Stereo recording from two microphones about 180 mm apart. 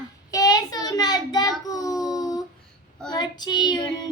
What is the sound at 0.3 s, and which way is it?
Child singing, 20° left (ahead or behind).